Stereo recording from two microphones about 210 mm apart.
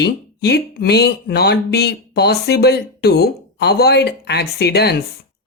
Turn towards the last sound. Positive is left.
turn(degrees=50)  # may be behind; listen again after turning